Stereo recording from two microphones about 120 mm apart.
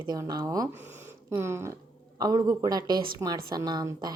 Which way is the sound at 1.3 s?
20° right (ahead or behind).